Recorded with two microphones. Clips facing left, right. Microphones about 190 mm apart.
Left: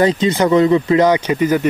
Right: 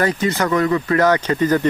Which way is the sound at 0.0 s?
20° left (ahead or behind).